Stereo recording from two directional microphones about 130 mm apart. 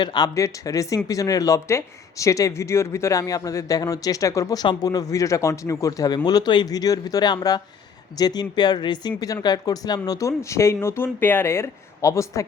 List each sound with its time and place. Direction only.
0.0 s speech: 35° left (ahead or behind)